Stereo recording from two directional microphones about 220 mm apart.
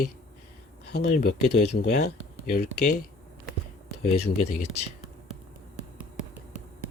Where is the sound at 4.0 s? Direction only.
45° left (ahead or behind).